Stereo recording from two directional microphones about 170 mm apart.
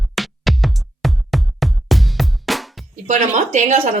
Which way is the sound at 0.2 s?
Centre (ahead or behind).